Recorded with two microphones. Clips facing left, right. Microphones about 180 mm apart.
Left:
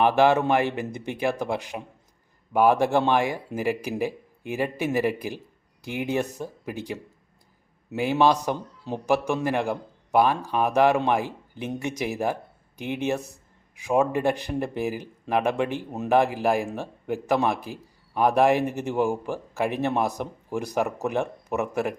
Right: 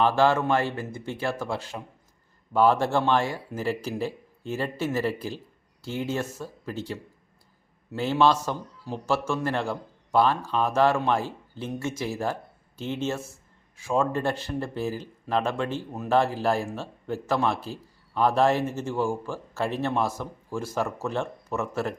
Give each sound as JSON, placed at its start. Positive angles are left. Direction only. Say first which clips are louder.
{"t": 0.0, "sound": "speech", "louder": "left 2 dB", "side_deg": 15}